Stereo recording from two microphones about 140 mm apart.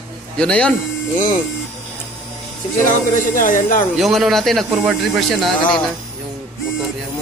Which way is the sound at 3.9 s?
Centre (ahead or behind).